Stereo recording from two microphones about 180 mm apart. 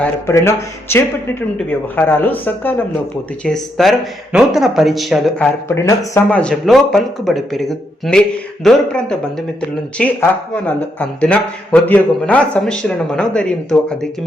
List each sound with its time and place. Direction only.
0.0 s speech: 15° left (ahead or behind)
5.6 s speech: 15° left (ahead or behind)
6.3 s speech: 5° left (ahead or behind)